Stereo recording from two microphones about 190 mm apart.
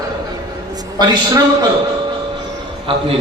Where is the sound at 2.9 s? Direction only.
25° right (ahead or behind).